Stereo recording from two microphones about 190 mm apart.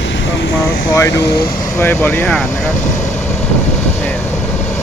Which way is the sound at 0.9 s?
15° left (ahead or behind).